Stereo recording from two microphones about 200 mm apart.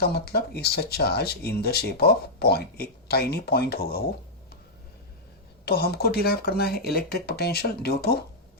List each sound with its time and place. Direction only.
0.0 s speech: 50° left (ahead or behind)
5.6 s speech: 50° left (ahead or behind)